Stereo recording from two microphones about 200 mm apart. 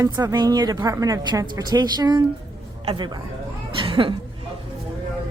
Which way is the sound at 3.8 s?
25° right (ahead or behind).